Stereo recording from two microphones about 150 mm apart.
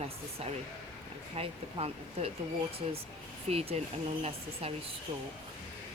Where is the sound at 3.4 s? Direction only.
40° right (ahead or behind).